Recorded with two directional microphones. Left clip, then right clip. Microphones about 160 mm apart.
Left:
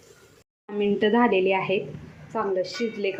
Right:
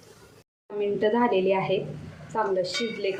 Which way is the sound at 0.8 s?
35° left (ahead or behind).